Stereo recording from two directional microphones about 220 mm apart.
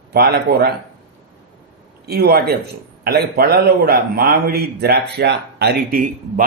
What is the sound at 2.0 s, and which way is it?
A man's voice, 45° right (ahead or behind).